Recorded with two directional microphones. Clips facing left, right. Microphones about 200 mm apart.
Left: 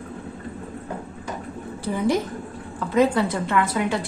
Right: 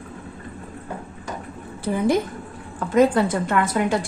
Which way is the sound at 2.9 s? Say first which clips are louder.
Right 2 dB; 45° right (ahead or behind).